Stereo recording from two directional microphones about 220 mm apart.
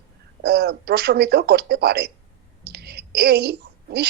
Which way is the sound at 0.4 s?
45° right (ahead or behind).